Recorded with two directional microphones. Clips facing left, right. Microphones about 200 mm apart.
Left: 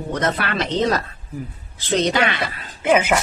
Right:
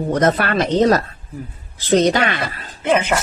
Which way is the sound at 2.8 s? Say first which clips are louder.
Even; 5° left (ahead or behind).